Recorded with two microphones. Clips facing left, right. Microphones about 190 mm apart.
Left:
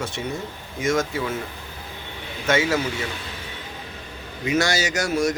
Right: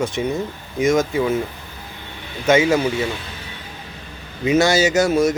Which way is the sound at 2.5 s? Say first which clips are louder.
Right 6 dB; 20° right (ahead or behind).